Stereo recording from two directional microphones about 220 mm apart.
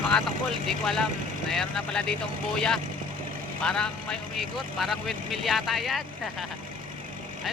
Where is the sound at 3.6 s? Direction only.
5° left (ahead or behind).